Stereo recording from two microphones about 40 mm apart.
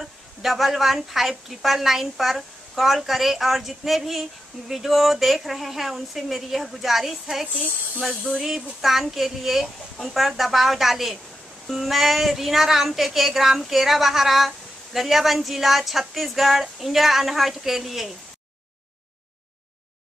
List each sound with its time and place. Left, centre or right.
0.4 s speech: centre
8.8 s speech: centre